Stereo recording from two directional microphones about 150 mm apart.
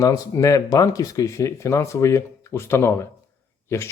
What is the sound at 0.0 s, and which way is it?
Speech, 20° left (ahead or behind).